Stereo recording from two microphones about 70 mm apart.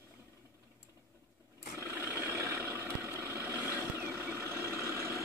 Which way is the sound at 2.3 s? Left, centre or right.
Right.